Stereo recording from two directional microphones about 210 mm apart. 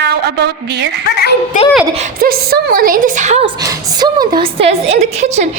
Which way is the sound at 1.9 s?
40° right (ahead or behind).